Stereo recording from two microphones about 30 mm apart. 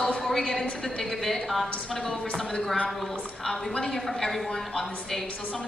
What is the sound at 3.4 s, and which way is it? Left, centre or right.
A woman's voice, centre.